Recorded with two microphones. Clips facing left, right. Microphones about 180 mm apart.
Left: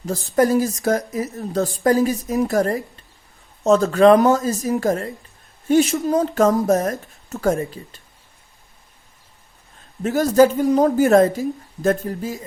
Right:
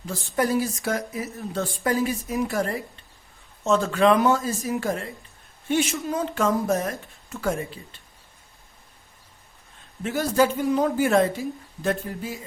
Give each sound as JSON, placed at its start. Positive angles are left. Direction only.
{"t": 0.0, "sound": "speech", "side_deg": 40}
{"t": 10.0, "sound": "a woman's voice", "side_deg": 40}